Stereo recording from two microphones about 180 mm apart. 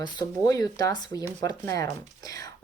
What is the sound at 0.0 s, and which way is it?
Speech, 20° left (ahead or behind).